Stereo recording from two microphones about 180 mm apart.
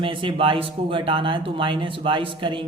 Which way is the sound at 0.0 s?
30° right (ahead or behind).